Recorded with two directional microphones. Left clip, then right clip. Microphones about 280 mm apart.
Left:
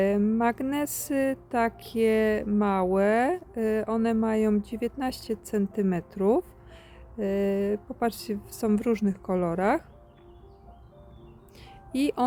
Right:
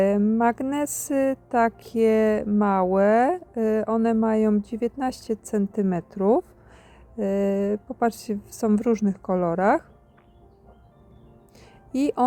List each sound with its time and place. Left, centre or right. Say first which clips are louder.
0.0 s speech: right 4 dB; centre
11.9 s speech: right 3 dB; centre